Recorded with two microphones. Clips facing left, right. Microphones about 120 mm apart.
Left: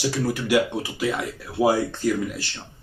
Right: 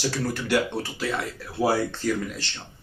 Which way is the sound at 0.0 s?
10° left (ahead or behind).